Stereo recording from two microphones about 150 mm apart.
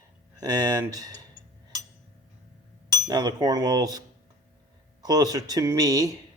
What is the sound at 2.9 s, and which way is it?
Speech, 25° right (ahead or behind).